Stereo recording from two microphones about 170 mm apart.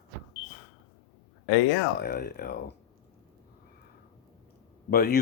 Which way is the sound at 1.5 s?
80° left.